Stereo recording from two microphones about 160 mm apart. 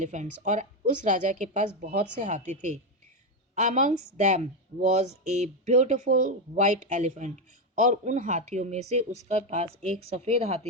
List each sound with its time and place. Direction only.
0.0 s a woman's voice: 50° right (ahead or behind)